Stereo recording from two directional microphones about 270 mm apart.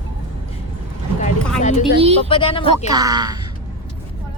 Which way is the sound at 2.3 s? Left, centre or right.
Centre.